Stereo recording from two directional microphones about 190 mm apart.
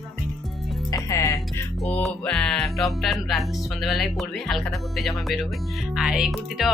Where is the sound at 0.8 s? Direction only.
15° left (ahead or behind).